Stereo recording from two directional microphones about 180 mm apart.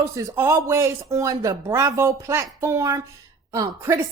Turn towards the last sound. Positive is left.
turn(degrees=-15)  # may be behind; listen again after turning